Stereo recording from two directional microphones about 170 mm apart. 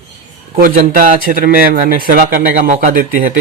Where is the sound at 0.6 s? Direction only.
55° right (ahead or behind).